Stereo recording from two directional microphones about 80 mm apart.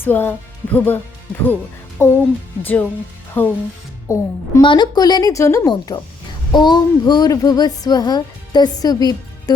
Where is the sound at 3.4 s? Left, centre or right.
Left.